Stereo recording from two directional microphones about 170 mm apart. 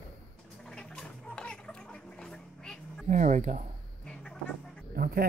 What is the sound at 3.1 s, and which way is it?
Speech, 45° right (ahead or behind).